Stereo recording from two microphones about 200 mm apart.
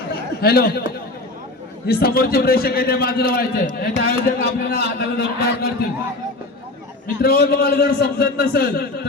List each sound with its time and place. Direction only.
0.1 s a sound: 50° left (ahead or behind)
1.9 s a man's voice: 50° left (ahead or behind)
7.2 s a man's voice: 50° left (ahead or behind)